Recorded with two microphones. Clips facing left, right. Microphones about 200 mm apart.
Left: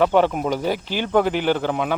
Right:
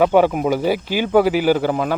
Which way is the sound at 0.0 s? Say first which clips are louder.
Right 3 dB; 10° right (ahead or behind).